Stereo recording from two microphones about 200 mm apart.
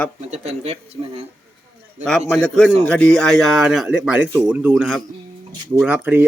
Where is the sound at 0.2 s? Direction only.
35° right (ahead or behind).